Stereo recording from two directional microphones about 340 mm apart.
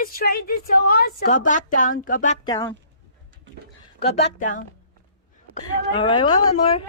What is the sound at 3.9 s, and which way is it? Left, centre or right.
Speech, centre.